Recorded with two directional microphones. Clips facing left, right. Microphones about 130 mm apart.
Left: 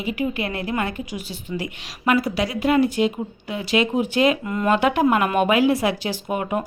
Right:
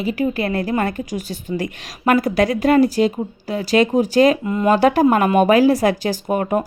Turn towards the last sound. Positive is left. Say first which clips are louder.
# right 5 dB
turn(degrees=-40)  # may be behind; listen again after turning